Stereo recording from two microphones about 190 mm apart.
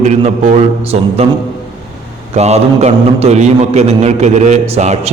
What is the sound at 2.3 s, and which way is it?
A man's voice, 35° right (ahead or behind).